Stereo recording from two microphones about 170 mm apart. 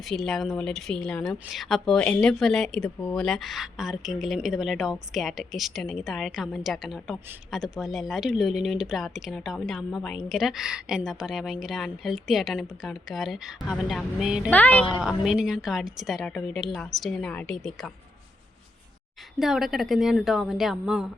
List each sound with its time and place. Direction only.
0.0 s a woman's voice: centre (ahead or behind)
14.5 s a woman's voice: 10° left (ahead or behind)
14.9 s a woman's voice: 5° right (ahead or behind)
19.4 s a woman's voice: centre (ahead or behind)